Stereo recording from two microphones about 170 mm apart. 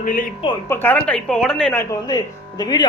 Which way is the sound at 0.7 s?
10° left (ahead or behind).